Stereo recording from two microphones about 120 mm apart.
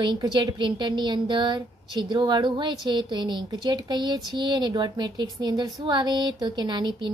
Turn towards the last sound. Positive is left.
turn(degrees=-40)  # may be behind; listen again after turning